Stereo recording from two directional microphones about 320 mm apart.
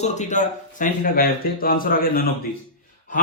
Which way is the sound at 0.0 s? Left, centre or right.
Left.